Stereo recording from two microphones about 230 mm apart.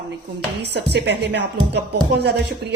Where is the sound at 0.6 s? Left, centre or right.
Right.